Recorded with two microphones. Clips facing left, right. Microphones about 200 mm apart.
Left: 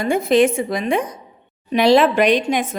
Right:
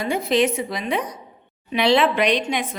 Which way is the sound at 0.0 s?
50° left (ahead or behind).